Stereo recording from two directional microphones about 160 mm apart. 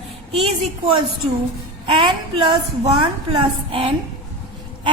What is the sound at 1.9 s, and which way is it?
A woman's voice, 30° right (ahead or behind).